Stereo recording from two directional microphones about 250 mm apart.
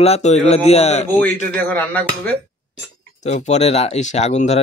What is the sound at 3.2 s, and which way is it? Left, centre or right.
Speech, left.